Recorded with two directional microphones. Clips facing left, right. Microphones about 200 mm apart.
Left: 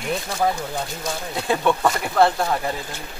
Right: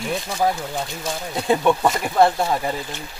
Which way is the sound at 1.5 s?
20° right (ahead or behind).